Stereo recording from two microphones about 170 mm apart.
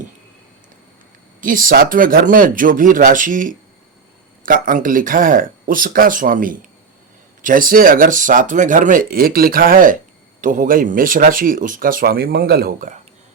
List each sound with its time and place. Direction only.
1.4 s speech: 55° right (ahead or behind)